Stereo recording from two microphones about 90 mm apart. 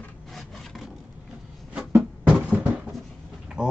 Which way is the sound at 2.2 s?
15° right (ahead or behind).